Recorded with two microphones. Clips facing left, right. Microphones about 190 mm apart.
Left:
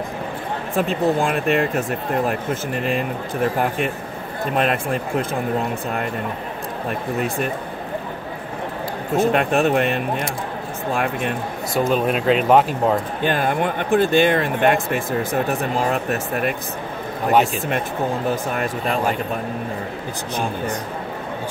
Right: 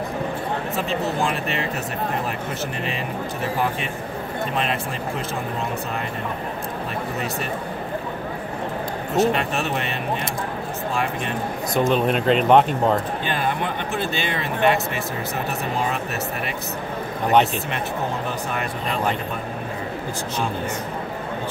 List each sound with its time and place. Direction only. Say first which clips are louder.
0.7 s speech: left 7 dB; 50° left (ahead or behind)
4.6 s speech: left 8 dB; 50° left (ahead or behind)
9.1 s speech: left 3 dB; 55° left (ahead or behind)
11.7 s speech: even; 5° left (ahead or behind)
13.2 s speech: left 4 dB; 50° left (ahead or behind)
18.3 s speech: left 4 dB; 45° left (ahead or behind)